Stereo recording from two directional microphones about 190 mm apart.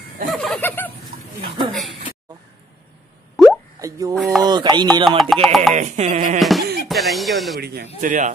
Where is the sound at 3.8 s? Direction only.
15° right (ahead or behind).